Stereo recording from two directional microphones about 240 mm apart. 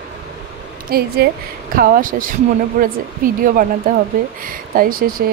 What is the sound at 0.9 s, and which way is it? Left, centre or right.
Speech, right.